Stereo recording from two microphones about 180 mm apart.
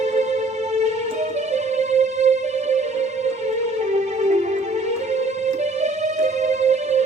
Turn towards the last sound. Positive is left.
turn(degrees=-40)  # may be behind; listen again after turning